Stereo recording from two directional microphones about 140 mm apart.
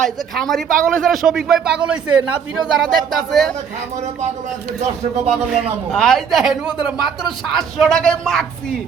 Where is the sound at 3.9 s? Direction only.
60° right (ahead or behind).